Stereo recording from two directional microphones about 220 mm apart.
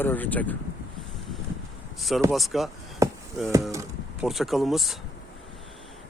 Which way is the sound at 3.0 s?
15° right (ahead or behind).